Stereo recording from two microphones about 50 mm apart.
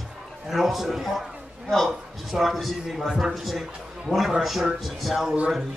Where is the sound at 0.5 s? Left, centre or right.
Centre.